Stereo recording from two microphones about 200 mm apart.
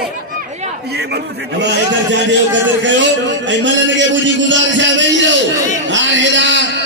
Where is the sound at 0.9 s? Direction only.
55° right (ahead or behind).